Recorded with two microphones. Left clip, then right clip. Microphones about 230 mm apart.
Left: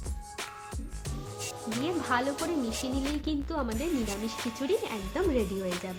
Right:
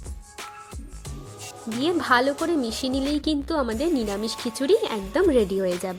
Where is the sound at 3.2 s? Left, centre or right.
Right.